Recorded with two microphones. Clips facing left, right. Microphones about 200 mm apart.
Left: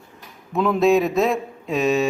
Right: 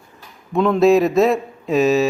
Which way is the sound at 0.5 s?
5° left (ahead or behind).